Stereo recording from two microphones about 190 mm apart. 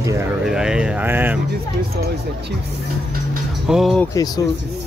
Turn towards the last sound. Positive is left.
turn(degrees=20)  # may be behind; listen again after turning